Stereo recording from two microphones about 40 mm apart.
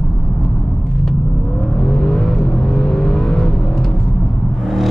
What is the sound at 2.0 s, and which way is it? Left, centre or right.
Vehicle, left.